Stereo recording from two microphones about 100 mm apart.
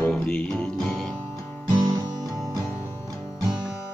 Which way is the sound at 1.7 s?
35° right (ahead or behind).